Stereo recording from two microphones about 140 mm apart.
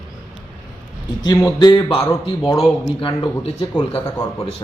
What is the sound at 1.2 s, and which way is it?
Speech, 25° left (ahead or behind).